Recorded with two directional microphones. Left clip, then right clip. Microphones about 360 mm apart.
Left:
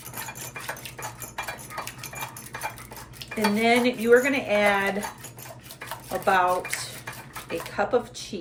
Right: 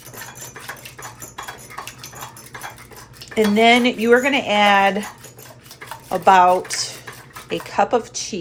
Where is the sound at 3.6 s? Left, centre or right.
Centre.